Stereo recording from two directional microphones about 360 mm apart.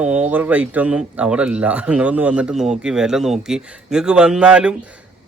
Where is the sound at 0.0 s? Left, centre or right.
Centre.